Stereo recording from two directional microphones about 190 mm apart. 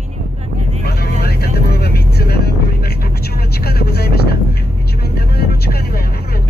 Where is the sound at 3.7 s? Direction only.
55° left (ahead or behind).